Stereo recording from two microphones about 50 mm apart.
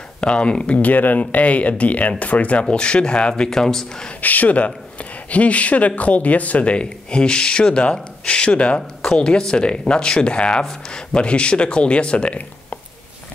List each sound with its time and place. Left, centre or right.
0.2 s speech: left
3.4 s speech: centre
4.2 s speech: left